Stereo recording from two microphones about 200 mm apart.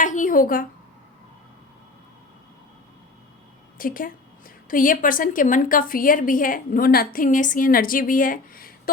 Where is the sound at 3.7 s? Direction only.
45° left (ahead or behind).